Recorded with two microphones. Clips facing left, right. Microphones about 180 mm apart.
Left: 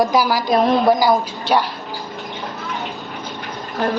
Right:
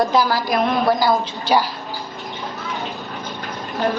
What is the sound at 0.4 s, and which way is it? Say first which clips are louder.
Speech: left 3 dB; 25° left (ahead or behind).